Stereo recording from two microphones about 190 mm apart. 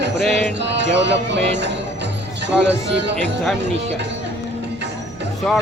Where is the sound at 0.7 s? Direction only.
70° right (ahead or behind).